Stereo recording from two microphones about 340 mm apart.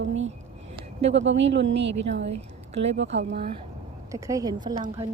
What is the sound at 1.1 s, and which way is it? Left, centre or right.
Speech, right.